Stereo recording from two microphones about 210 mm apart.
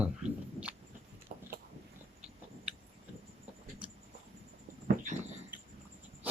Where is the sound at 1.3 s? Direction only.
45° right (ahead or behind).